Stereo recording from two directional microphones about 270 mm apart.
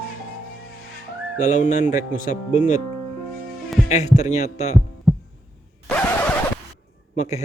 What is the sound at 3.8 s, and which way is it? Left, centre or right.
Speech, left.